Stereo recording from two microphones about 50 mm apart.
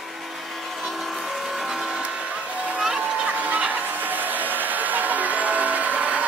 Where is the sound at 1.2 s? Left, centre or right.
Centre.